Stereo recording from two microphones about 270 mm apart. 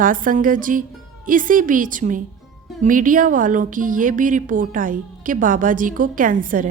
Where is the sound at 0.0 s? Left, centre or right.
Right.